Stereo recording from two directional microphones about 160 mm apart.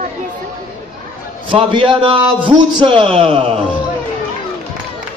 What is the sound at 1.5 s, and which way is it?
A man's voice, 35° right (ahead or behind).